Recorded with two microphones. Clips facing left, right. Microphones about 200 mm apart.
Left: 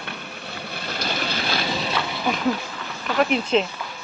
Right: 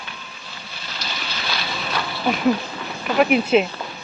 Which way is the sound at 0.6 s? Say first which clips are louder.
Left 6 dB; 55° left (ahead or behind).